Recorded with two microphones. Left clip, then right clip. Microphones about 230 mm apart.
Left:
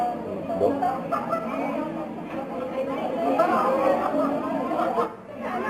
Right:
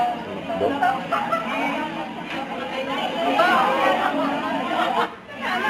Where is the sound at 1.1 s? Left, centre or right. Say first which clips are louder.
Right 4 dB; right.